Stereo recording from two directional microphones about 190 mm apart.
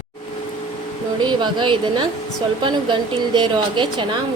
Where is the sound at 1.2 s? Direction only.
25° right (ahead or behind).